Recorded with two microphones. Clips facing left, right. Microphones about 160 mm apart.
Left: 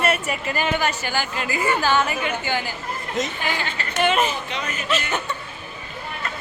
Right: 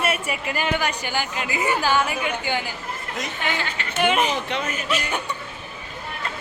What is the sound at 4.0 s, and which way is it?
Speech, 15° right (ahead or behind).